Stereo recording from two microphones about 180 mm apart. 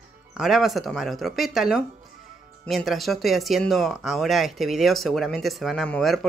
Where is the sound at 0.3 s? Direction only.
Centre (ahead or behind).